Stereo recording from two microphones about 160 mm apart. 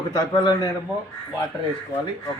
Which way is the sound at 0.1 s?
25° left (ahead or behind).